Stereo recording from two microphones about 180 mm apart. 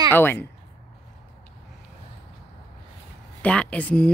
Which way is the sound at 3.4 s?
5° left (ahead or behind).